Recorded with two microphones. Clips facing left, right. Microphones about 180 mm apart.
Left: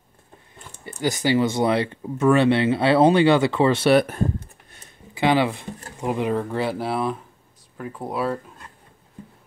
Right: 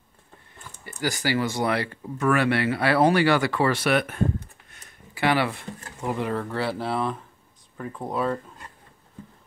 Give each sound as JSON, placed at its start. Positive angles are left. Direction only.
{"t": 1.0, "sound": "speech", "side_deg": 20}
{"t": 5.1, "sound": "speech", "side_deg": 20}